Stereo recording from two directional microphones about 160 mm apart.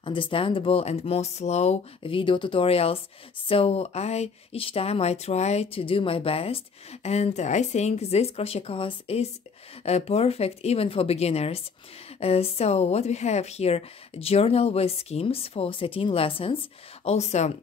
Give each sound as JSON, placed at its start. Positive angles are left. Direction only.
{"t": 0.0, "sound": "speech", "side_deg": 30}